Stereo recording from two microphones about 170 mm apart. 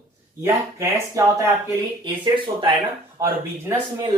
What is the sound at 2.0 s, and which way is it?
Speech, 30° right (ahead or behind).